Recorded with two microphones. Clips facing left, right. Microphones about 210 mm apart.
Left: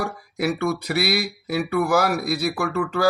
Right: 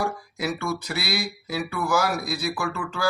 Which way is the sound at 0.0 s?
60° left (ahead or behind).